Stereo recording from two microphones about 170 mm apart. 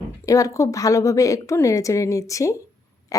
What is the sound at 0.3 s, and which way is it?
Speech, 20° left (ahead or behind).